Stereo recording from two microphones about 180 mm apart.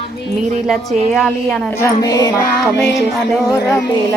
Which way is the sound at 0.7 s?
Centre (ahead or behind).